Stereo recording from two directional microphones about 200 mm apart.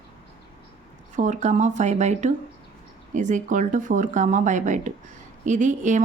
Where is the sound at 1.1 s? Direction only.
35° right (ahead or behind).